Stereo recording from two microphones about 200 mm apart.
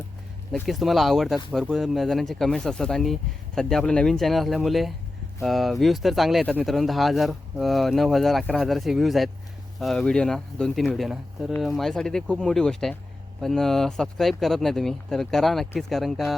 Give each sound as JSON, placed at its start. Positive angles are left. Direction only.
{"t": 0.5, "sound": "speech", "side_deg": 0}